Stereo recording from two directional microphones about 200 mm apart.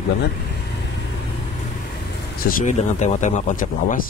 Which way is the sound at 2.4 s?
45° left (ahead or behind).